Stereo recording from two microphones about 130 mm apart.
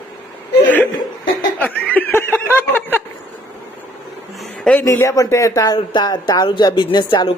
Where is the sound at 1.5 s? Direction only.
10° left (ahead or behind).